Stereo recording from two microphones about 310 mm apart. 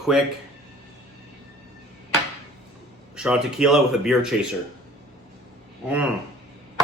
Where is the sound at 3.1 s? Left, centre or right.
Centre.